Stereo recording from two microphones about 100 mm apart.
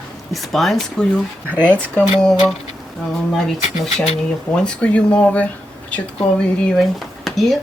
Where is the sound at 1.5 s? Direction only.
20° right (ahead or behind).